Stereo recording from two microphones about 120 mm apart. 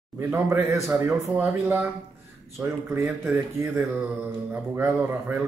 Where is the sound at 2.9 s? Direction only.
15° right (ahead or behind).